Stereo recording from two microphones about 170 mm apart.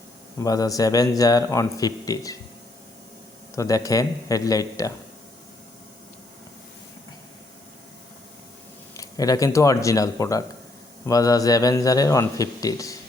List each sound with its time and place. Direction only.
0.4 s speech: 20° left (ahead or behind)
3.5 s speech: 20° left (ahead or behind)
9.0 s speech: 20° left (ahead or behind)